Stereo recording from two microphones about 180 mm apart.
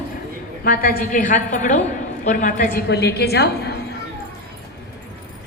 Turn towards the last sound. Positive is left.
turn(degrees=65)  # may be behind; listen again after turning